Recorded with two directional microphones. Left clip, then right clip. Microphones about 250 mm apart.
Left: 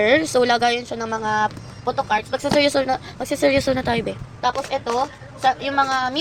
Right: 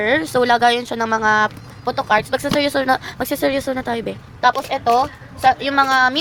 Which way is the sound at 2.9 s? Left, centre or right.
Right.